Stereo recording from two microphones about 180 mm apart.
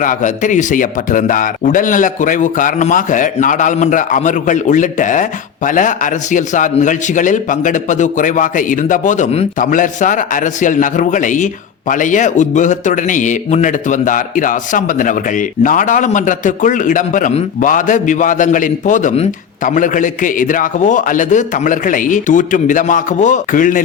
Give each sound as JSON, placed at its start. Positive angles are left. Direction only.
{"t": 0.0, "sound": "a man's voice", "side_deg": 45}